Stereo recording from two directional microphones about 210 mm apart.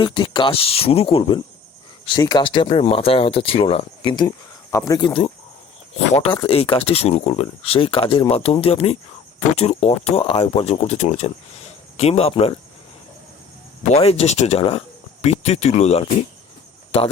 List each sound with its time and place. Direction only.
0.0 s speech: 20° left (ahead or behind)
13.9 s speech: 30° left (ahead or behind)